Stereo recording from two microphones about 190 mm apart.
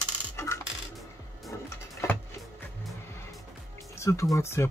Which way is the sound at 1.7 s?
15° left (ahead or behind).